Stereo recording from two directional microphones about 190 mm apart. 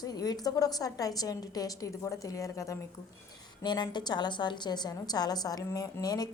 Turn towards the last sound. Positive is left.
turn(degrees=20)  # may be behind; listen again after turning